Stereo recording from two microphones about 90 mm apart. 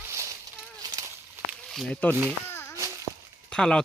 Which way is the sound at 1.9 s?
15° left (ahead or behind).